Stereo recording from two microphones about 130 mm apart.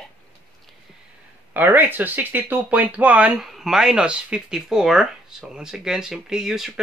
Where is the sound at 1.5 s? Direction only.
15° right (ahead or behind).